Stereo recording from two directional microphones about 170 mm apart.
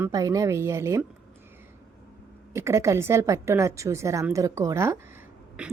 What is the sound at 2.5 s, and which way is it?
A woman's voice, 15° right (ahead or behind).